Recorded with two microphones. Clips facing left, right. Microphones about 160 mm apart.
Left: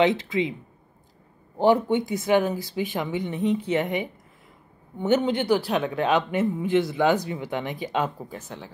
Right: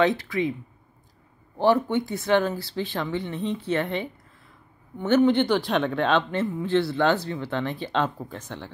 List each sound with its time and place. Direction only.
0.0 s speech: 20° left (ahead or behind)
1.6 s speech: 15° left (ahead or behind)